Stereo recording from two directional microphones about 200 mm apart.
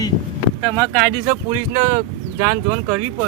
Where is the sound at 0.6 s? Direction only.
5° left (ahead or behind).